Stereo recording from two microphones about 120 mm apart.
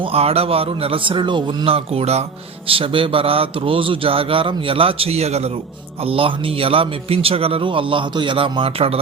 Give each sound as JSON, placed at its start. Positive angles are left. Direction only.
{"t": 0.0, "sound": "speech", "side_deg": -55}
{"t": 2.6, "sound": "speech", "side_deg": -50}
{"t": 6.0, "sound": "speech", "side_deg": -50}